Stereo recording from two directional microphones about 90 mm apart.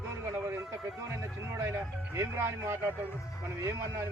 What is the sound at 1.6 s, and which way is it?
Speech, 30° right (ahead or behind).